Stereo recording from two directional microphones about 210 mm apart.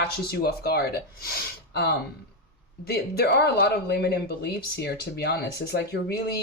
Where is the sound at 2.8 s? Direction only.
50° left (ahead or behind).